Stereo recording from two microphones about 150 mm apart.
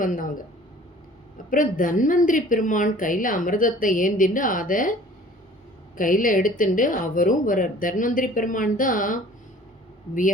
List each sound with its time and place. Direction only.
0.0 s a woman's voice: 65° left (ahead or behind)
1.5 s a woman's voice: 65° left (ahead or behind)
6.0 s a woman's voice: 65° left (ahead or behind)